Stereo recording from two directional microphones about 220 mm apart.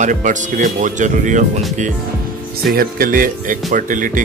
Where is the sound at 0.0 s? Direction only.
35° right (ahead or behind).